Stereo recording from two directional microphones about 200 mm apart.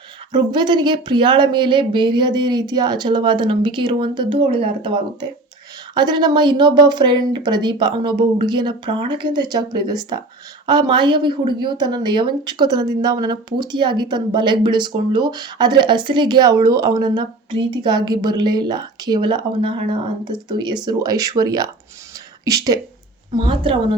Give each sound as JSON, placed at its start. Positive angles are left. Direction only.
{"t": 0.3, "sound": "speech", "side_deg": -20}